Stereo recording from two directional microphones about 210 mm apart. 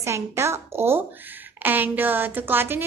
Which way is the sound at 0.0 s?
15° right (ahead or behind).